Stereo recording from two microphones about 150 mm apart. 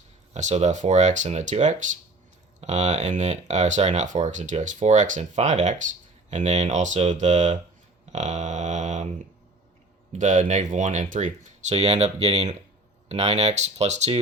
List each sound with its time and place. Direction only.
0.3 s speech: 50° right (ahead or behind)
10.1 s speech: 55° right (ahead or behind)